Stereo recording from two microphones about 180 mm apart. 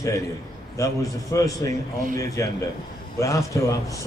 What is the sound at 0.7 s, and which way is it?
A man's voice, 15° left (ahead or behind).